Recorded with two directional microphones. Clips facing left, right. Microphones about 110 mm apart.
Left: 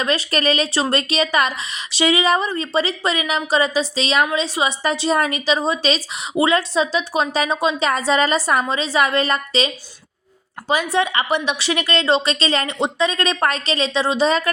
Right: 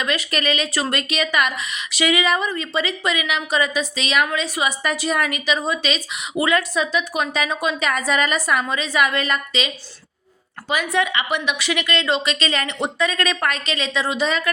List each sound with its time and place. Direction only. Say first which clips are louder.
0.0 s a woman's voice: left 3 dB; 35° left (ahead or behind)